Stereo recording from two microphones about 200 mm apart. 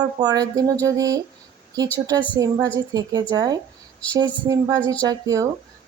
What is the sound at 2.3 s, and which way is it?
Speech, 15° right (ahead or behind).